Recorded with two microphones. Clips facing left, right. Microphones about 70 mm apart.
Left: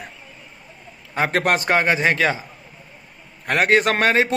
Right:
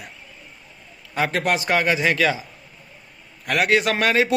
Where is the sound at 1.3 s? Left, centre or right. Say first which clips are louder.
Left 3 dB; left.